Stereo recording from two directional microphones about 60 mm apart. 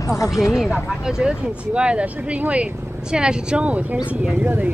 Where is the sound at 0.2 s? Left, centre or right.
Left.